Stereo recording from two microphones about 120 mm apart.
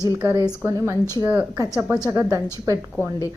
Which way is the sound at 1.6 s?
30° right (ahead or behind).